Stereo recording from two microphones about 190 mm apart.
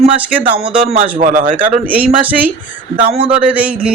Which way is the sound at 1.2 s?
45° right (ahead or behind).